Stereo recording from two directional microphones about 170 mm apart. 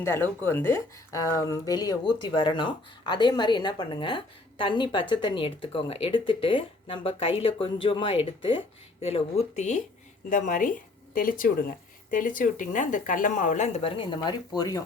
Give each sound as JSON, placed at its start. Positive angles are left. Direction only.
{"t": 0.0, "sound": "a woman's voice", "side_deg": 15}